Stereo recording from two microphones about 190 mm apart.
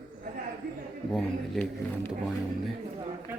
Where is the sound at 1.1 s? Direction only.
Centre (ahead or behind).